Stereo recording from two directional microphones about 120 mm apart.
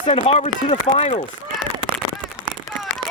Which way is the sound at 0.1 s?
55° left (ahead or behind).